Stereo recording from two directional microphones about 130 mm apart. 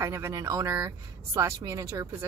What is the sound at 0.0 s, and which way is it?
A woman's voice, 25° right (ahead or behind).